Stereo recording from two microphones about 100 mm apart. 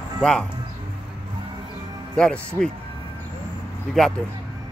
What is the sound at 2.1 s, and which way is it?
Speech, 10° left (ahead or behind).